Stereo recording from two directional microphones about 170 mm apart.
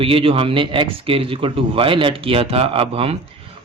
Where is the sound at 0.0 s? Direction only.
30° right (ahead or behind).